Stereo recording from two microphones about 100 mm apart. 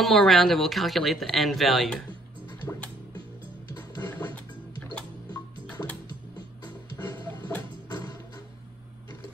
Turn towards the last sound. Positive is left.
turn(degrees=20)  # may be behind; listen again after turning